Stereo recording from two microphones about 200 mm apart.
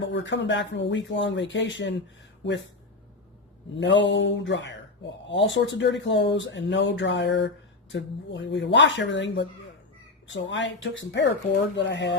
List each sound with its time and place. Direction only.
0.0 s speech: 65° left (ahead or behind)
3.8 s speech: 65° left (ahead or behind)